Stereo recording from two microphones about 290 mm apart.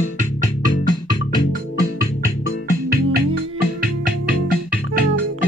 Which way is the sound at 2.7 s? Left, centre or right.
Right.